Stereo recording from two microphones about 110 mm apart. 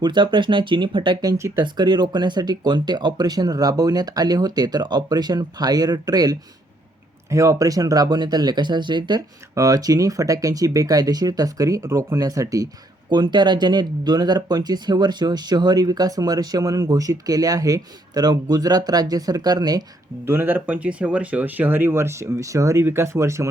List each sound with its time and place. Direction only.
0.0 s speech: 45° right (ahead or behind)
1.2 s speech: 30° right (ahead or behind)
13.1 s speech: 45° right (ahead or behind)
20.2 s speech: 20° right (ahead or behind)